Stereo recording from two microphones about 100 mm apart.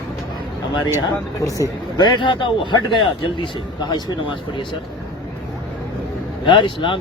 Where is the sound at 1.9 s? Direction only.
50° left (ahead or behind).